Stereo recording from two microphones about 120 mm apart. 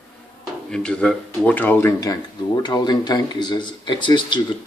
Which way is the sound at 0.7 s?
10° left (ahead or behind).